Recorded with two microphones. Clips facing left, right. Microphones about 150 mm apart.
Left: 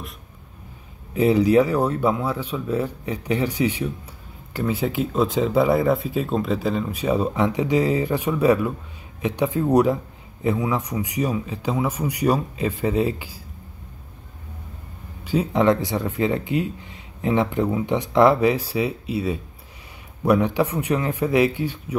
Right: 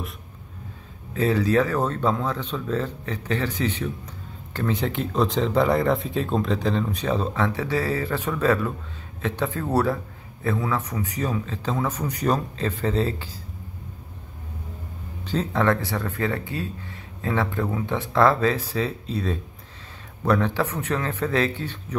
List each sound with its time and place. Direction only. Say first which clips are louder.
1.1 s speech: left 5 dB; 15° left (ahead or behind)
15.2 s speech: left 4 dB; 15° left (ahead or behind)